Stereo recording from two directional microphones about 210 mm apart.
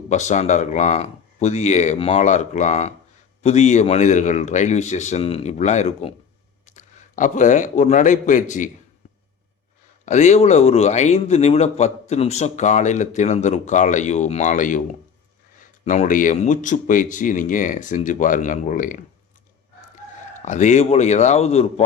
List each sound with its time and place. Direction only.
0.1 s a man's voice: 35° left (ahead or behind)
10.1 s a man's voice: 30° left (ahead or behind)
15.8 s a man's voice: 35° left (ahead or behind)
20.3 s a man's voice: 35° left (ahead or behind)